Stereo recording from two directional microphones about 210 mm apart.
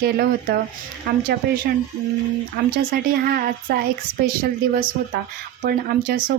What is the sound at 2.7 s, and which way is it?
A woman's voice, 45° right (ahead or behind).